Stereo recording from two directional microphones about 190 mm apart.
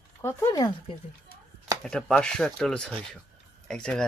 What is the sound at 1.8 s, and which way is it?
Speech, 5° left (ahead or behind).